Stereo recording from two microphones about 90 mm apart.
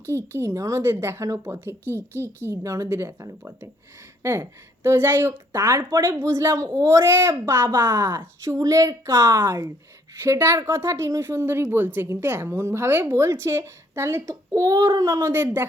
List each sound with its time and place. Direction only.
0.3 s a woman's voice: 35° right (ahead or behind)